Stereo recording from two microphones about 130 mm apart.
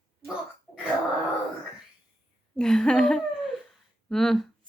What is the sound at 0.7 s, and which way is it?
Wail, 10° left (ahead or behind).